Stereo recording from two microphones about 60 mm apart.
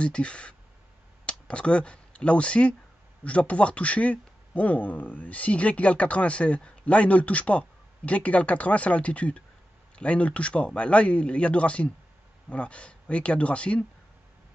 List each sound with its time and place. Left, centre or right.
0.0 s speech: centre